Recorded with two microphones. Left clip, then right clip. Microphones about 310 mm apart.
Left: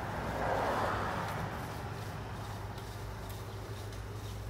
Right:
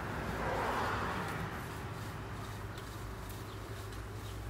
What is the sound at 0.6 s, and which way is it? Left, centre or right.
Vehicle, left.